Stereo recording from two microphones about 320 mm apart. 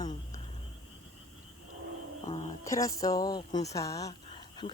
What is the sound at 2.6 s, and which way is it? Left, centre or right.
Speech, centre.